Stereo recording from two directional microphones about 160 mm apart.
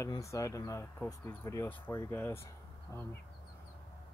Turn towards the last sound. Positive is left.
turn(degrees=20)  # may be behind; listen again after turning